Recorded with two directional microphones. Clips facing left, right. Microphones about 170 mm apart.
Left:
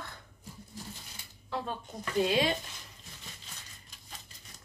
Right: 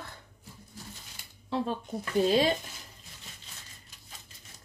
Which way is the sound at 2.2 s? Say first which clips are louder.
Right 4 dB; 40° right (ahead or behind).